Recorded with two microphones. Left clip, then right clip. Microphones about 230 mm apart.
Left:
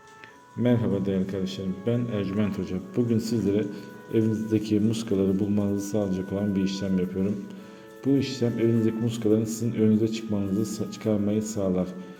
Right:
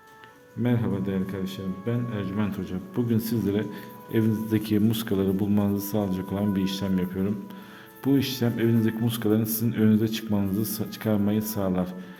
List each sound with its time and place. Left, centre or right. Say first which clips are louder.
0.6 s a man's voice: left 3 dB; centre; by 11.9 s right